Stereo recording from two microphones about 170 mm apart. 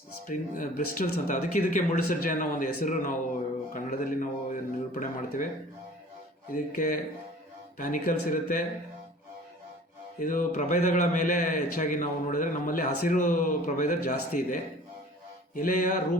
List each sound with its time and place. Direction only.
0.3 s a man's voice: 50° left (ahead or behind)
6.5 s a man's voice: 55° left (ahead or behind)
10.2 s a man's voice: 55° left (ahead or behind)